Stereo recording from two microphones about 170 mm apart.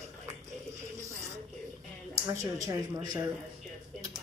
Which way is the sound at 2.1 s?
20° right (ahead or behind).